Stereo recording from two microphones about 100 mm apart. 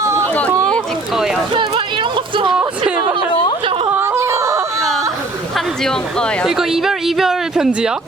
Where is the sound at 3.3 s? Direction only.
55° left (ahead or behind).